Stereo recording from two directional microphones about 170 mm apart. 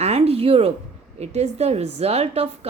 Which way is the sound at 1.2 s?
40° right (ahead or behind).